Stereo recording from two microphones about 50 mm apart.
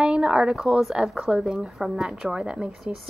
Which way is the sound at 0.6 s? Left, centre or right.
Centre.